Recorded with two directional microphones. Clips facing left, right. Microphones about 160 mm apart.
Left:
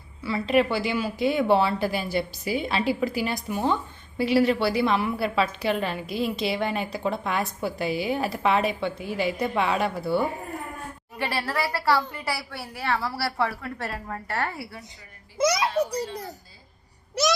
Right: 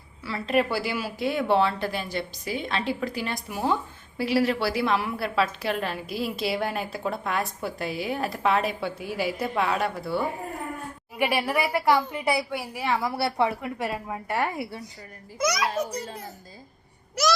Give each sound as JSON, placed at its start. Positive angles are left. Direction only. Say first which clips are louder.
{"t": 0.2, "sound": "a woman's voice", "louder": "left 3 dB", "side_deg": 0}
{"t": 11.2, "sound": "a woman's voice", "louder": "right 3 dB", "side_deg": -15}
{"t": 15.4, "sound": "a child's voice", "louder": "left 3 dB", "side_deg": 30}